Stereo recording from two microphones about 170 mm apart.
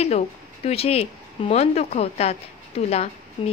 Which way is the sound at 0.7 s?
35° left (ahead or behind).